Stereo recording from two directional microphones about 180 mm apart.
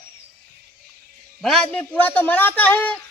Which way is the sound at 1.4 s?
5° left (ahead or behind).